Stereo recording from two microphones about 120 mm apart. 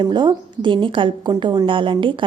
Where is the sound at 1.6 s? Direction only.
45° right (ahead or behind).